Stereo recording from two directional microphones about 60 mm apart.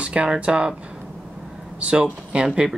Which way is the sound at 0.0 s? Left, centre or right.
Centre.